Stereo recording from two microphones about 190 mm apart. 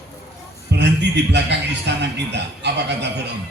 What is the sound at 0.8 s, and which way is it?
Speech, 65° right (ahead or behind).